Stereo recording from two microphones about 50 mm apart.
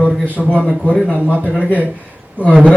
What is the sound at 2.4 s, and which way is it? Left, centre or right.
Speech, right.